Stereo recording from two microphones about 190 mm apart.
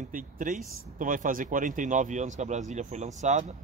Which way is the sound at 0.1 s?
45° right (ahead or behind).